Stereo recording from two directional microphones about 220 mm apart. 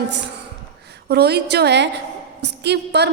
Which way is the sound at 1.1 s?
50° right (ahead or behind).